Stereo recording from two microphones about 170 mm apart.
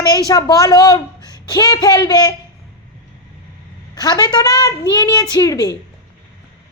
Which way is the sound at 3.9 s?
25° left (ahead or behind).